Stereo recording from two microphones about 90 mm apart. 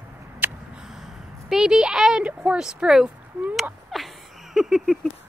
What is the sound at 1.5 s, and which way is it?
Speech, 5° right (ahead or behind).